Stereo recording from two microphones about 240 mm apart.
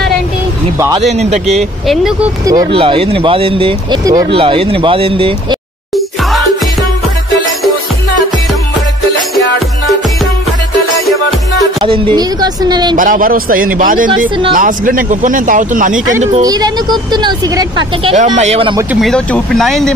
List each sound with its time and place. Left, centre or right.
0.7 s speech: centre
1.0 s speech: right
2.4 s speech: centre
11.8 s speech: right
12.9 s speech: right
16.4 s speech: centre
18.1 s speech: right
18.9 s speech: centre